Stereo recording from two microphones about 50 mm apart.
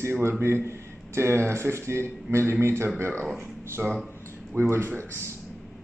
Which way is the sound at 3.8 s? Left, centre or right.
Centre.